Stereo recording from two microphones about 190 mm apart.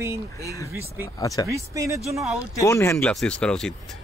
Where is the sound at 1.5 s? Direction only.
15° right (ahead or behind).